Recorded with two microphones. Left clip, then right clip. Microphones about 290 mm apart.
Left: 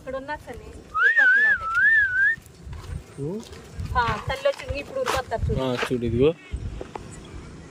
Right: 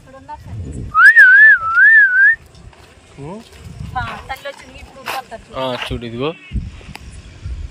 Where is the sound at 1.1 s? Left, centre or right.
Centre.